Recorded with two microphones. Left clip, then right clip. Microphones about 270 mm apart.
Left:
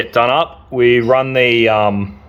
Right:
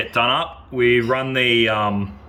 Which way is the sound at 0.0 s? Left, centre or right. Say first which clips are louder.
Left 6 dB; centre.